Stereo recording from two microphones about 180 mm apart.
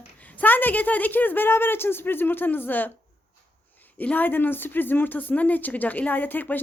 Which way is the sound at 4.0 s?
10° left (ahead or behind).